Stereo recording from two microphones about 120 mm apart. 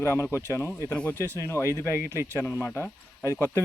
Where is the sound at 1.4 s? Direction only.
25° left (ahead or behind).